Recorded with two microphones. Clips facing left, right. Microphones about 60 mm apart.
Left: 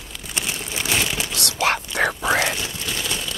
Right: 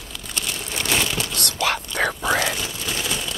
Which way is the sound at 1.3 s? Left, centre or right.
Right.